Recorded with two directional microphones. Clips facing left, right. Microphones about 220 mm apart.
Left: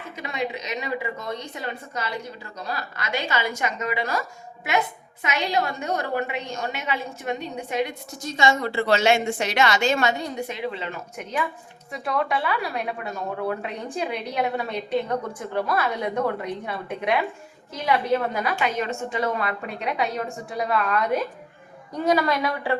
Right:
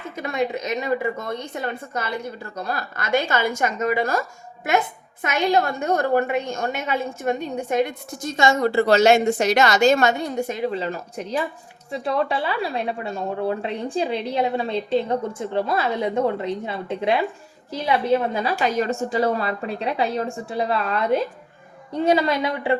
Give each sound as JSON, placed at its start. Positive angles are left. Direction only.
{"t": 0.2, "sound": "a woman's voice", "side_deg": -50}